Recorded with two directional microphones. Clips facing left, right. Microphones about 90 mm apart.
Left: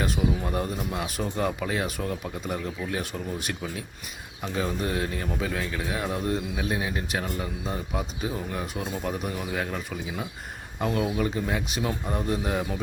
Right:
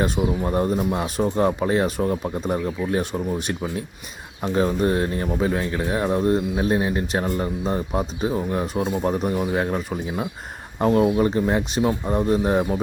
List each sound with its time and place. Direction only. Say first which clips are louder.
0.0 s speech: right 5 dB; 35° right (ahead or behind)
3.3 s speech: right 6 dB; 25° right (ahead or behind)
4.4 s speech: right 8 dB; 35° right (ahead or behind)